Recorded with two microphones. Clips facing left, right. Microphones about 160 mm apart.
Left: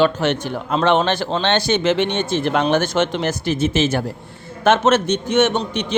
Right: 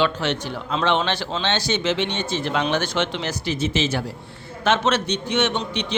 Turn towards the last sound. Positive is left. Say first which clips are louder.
# left 5 dB
turn(degrees=45)  # may be behind; listen again after turning